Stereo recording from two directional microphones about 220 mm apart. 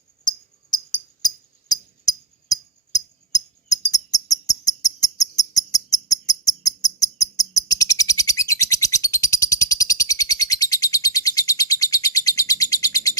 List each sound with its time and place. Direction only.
1.2 s music: 15° left (ahead or behind)
3.9 s cricket: 15° left (ahead or behind)
7.2 s bird: 15° left (ahead or behind)